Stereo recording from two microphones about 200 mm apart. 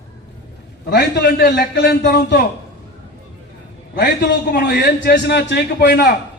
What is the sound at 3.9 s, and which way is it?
A man's voice, 55° left (ahead or behind).